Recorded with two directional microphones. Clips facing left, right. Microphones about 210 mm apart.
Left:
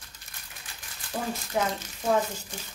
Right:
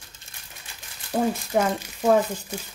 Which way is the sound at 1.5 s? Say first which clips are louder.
Right 5 dB; 55° right (ahead or behind).